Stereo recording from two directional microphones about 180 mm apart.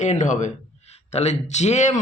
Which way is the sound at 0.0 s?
40° left (ahead or behind).